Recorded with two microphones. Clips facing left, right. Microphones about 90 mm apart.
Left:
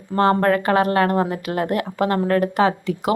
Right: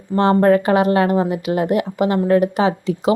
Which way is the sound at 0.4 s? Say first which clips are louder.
Right 4 dB; 20° right (ahead or behind).